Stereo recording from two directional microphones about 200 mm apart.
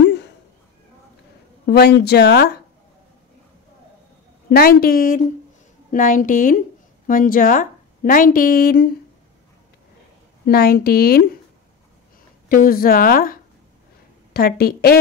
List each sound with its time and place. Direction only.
1.7 s speech: 55° left (ahead or behind)
4.5 s a woman's voice: 50° left (ahead or behind)
10.4 s speech: 50° left (ahead or behind)
12.4 s speech: 45° left (ahead or behind)